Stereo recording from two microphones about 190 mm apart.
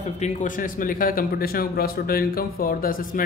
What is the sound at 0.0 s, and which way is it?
Speech, 35° left (ahead or behind).